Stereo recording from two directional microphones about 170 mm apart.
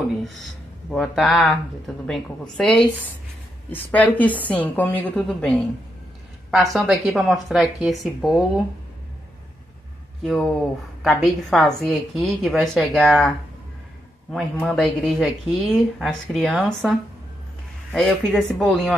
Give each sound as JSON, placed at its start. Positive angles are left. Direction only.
{"t": 0.2, "sound": "a woman's voice", "side_deg": 0}
{"t": 10.2, "sound": "speech", "side_deg": 5}
{"t": 14.3, "sound": "speech", "side_deg": 5}
{"t": 17.9, "sound": "speech", "side_deg": 5}